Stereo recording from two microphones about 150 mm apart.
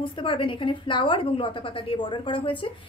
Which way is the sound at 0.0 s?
35° left (ahead or behind).